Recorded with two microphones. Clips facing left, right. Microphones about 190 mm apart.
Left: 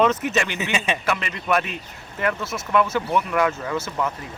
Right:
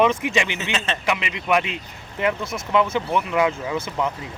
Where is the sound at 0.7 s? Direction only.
10° left (ahead or behind).